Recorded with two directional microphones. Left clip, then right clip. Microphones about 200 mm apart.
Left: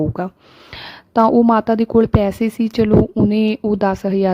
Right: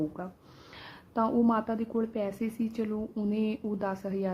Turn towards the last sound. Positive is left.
turn(degrees=50)  # may be behind; listen again after turning